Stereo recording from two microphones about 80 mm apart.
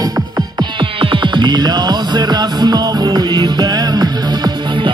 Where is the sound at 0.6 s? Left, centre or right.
Right.